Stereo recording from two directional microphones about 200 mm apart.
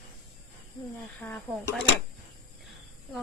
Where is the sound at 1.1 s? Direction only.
5° left (ahead or behind).